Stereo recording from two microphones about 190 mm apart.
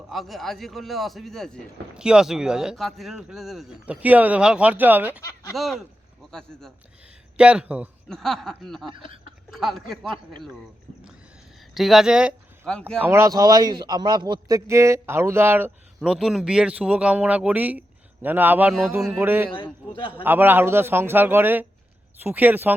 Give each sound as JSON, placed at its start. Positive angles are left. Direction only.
{"t": 0.1, "sound": "speech", "side_deg": 0}
{"t": 8.9, "sound": "speech", "side_deg": -30}
{"t": 9.5, "sound": "speech", "side_deg": 0}
{"t": 11.7, "sound": "speech", "side_deg": 0}
{"t": 13.0, "sound": "a man's voice", "side_deg": -15}
{"t": 16.0, "sound": "a man's voice", "side_deg": 0}
{"t": 19.5, "sound": "a man's voice", "side_deg": 25}
{"t": 20.2, "sound": "a man's voice", "side_deg": -10}